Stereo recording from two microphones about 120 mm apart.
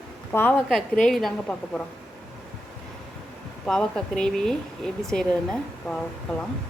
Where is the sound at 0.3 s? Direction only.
15° left (ahead or behind).